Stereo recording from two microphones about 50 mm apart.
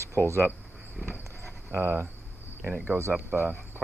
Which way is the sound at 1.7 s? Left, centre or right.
Right.